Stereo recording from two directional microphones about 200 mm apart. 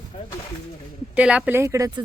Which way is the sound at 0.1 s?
30° left (ahead or behind).